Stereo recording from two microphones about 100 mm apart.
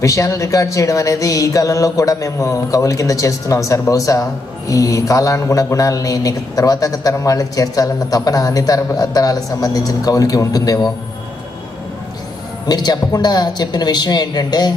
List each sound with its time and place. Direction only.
0.0 s speech: 30° left (ahead or behind)
12.6 s speech: 40° left (ahead or behind)